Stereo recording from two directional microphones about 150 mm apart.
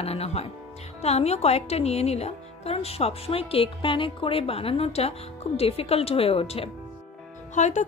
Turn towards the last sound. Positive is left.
turn(degrees=50)  # may be behind; listen again after turning